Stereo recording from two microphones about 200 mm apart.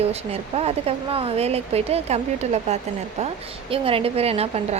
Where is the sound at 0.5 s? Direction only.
30° right (ahead or behind).